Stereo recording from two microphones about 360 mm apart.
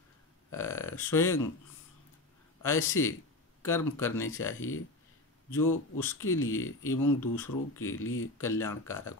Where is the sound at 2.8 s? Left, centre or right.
Left.